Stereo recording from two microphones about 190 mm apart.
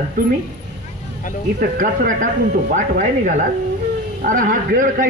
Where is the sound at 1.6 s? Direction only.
45° right (ahead or behind).